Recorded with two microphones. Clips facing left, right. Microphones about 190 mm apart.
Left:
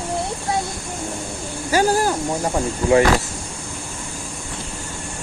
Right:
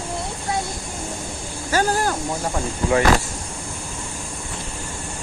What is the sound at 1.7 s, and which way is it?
Speech, 10° left (ahead or behind).